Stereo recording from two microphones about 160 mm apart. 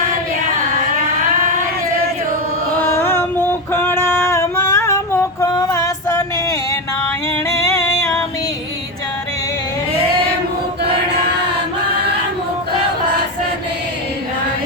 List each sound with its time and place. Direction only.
2.8 s female singing: 15° left (ahead or behind)
7.6 s music: 20° left (ahead or behind)